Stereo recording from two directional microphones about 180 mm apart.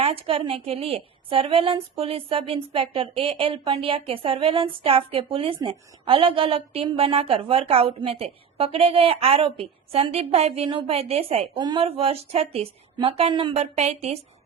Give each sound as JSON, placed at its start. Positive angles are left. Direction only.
{"t": 0.0, "sound": "a woman's voice", "side_deg": -35}